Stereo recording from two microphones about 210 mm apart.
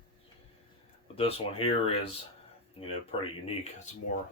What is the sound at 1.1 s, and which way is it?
Speech, 25° left (ahead or behind).